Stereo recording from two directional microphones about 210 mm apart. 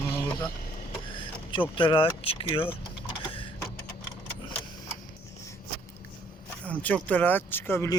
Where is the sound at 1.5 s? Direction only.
25° left (ahead or behind).